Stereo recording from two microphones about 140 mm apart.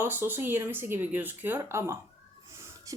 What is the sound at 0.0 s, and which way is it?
A woman's voice, 15° right (ahead or behind).